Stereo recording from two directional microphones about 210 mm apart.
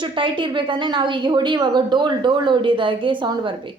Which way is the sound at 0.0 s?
25° right (ahead or behind).